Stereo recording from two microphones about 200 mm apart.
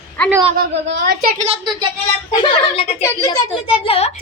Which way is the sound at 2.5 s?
25° left (ahead or behind).